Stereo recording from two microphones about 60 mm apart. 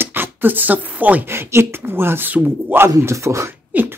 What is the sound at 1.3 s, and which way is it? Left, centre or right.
Speech, right.